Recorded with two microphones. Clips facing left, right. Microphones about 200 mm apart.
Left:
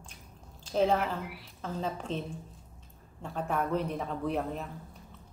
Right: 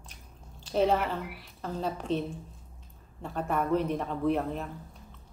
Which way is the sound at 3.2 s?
Centre (ahead or behind).